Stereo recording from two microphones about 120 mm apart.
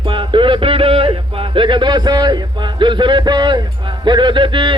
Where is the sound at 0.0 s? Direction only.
45° right (ahead or behind).